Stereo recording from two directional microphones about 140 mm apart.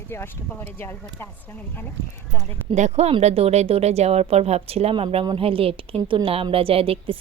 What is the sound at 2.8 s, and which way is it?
A woman's voice, 55° right (ahead or behind).